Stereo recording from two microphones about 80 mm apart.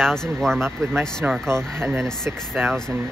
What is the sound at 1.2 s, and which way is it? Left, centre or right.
Speech, right.